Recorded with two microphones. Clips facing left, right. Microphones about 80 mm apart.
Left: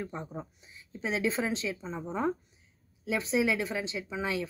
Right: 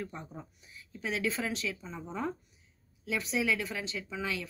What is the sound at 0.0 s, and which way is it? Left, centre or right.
Speech, left.